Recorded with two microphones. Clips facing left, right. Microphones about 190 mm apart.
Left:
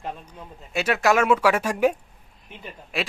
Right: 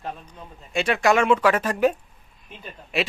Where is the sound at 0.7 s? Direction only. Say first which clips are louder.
Right 1 dB; 5° left (ahead or behind).